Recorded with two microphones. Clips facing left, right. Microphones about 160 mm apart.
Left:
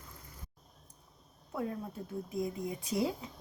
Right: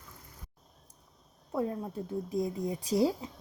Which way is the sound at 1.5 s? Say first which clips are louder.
Right 5 dB; 30° right (ahead or behind).